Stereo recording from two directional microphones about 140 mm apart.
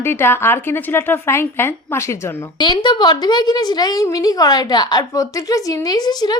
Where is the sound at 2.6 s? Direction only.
35° left (ahead or behind).